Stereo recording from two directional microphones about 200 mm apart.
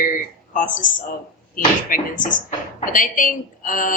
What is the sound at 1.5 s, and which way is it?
A woman's voice, 40° left (ahead or behind).